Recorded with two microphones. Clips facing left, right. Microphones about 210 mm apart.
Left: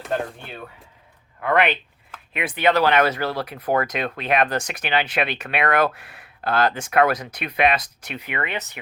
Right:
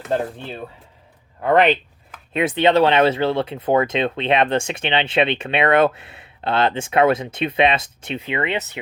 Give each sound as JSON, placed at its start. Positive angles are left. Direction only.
{"t": 1.4, "sound": "speech", "side_deg": -35}
{"t": 2.3, "sound": "speech", "side_deg": -25}